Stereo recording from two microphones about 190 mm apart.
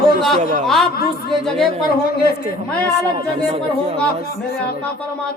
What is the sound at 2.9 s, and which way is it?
Speech, 20° right (ahead or behind).